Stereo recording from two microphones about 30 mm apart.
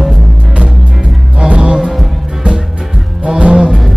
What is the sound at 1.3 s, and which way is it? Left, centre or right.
Music, right.